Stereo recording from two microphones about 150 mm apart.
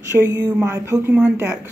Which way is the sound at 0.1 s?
15° right (ahead or behind).